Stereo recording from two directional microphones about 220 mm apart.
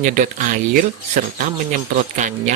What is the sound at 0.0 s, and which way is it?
Speech, 35° right (ahead or behind).